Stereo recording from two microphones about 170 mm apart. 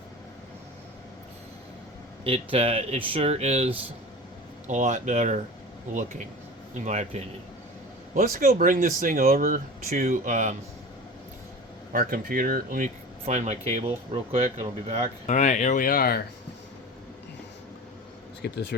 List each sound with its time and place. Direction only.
2.2 s speech: 35° right (ahead or behind)
8.1 s speech: 60° right (ahead or behind)
11.9 s speech: 55° right (ahead or behind); by 15.1 s 40° right (ahead or behind)
15.3 s speech: 45° left (ahead or behind); by 16.2 s 60° left (ahead or behind)
18.4 s speech: 75° left (ahead or behind)